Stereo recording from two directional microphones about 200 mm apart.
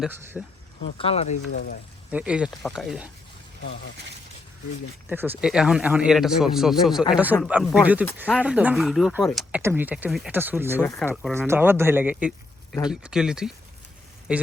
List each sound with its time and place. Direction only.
0.4 s speech: centre (ahead or behind)
0.9 s speech: 30° left (ahead or behind)
1.5 s speech: 50° left (ahead or behind)
2.0 s speech: 5° right (ahead or behind)
5.0 s speech: 10° right (ahead or behind)
10.8 s speech: 10° left (ahead or behind)
11.3 s speech: 10° right (ahead or behind)